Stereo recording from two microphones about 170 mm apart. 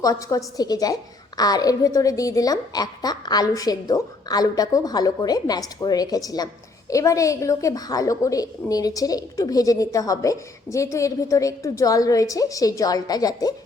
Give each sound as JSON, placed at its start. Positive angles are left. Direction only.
{"t": 0.0, "sound": "a woman's voice", "side_deg": 20}